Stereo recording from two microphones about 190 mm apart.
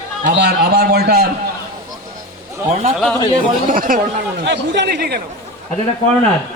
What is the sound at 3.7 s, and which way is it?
Speech, 45° right (ahead or behind).